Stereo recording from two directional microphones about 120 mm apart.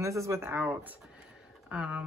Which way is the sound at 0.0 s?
25° right (ahead or behind).